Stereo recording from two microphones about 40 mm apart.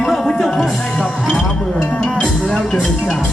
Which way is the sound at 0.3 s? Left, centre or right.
Centre.